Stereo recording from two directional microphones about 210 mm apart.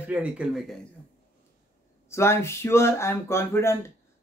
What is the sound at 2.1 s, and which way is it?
Speech, 10° left (ahead or behind).